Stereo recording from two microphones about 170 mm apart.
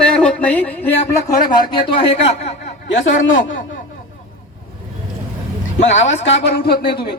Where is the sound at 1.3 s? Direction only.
50° left (ahead or behind).